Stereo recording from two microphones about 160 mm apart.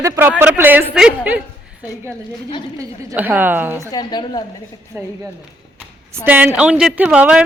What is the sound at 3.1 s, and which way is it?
Speech, 10° right (ahead or behind).